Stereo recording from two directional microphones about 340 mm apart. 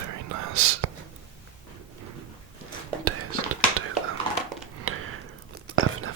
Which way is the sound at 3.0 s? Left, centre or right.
Right.